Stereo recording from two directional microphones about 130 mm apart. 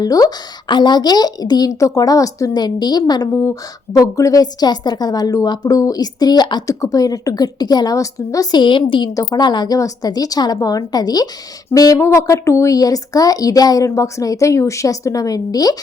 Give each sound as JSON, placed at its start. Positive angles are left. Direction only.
{"t": 0.0, "sound": "a woman's voice", "side_deg": 30}